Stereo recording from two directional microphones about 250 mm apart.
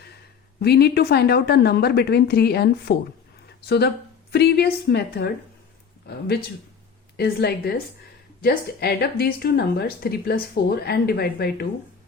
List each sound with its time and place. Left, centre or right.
0.6 s a woman's voice: left
7.2 s a woman's voice: left